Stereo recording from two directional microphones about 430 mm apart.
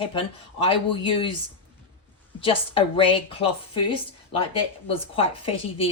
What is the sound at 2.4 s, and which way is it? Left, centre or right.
A woman's voice, centre.